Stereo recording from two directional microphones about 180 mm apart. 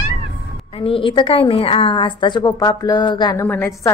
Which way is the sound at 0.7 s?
30° left (ahead or behind).